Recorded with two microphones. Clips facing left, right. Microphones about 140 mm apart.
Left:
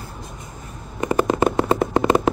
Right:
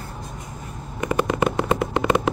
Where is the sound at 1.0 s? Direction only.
30° left (ahead or behind).